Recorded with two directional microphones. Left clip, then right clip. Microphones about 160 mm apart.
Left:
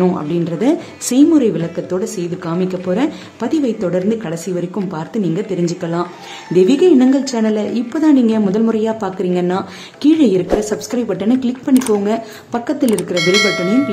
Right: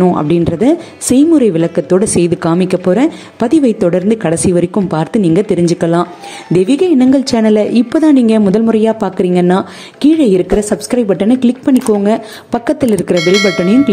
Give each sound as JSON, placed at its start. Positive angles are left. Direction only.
{"t": 0.3, "sound": "a woman's voice", "side_deg": -35}
{"t": 12.8, "sound": "speech", "side_deg": 0}